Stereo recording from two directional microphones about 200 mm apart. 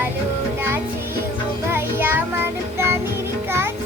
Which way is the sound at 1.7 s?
10° right (ahead or behind).